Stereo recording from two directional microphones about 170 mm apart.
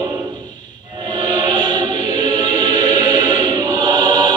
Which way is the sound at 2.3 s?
25° right (ahead or behind).